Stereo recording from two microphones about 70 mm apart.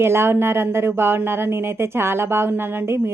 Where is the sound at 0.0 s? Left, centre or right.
Right.